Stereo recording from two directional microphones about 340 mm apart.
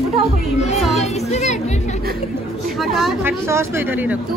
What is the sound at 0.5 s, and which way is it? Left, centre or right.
Speech, centre.